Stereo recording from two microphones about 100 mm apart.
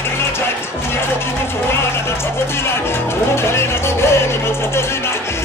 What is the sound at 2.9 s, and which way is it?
Music, 25° left (ahead or behind).